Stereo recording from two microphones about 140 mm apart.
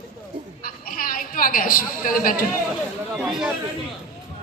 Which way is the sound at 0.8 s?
90° left.